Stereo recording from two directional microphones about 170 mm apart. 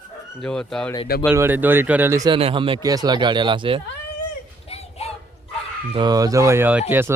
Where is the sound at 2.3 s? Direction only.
30° right (ahead or behind).